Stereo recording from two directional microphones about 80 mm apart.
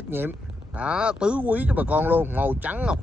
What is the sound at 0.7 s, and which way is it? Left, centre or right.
Speech, centre.